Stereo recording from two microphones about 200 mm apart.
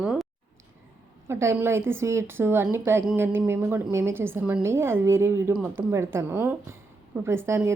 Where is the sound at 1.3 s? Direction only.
15° right (ahead or behind).